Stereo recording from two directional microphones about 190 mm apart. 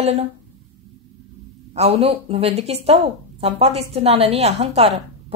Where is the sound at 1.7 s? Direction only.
35° right (ahead or behind).